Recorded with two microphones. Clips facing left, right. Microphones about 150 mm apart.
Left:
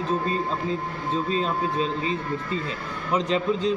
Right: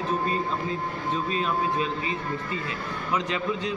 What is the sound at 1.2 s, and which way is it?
A man's voice, 30° left (ahead or behind).